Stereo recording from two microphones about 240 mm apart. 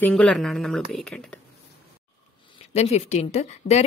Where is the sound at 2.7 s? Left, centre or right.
Left.